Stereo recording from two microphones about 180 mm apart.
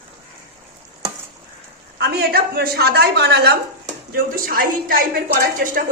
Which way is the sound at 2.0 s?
65° right (ahead or behind).